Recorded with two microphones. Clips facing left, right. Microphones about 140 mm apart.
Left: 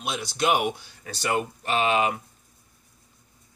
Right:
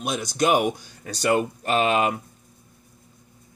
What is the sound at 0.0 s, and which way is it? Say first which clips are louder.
Speech: right 3 dB; 45° right (ahead or behind).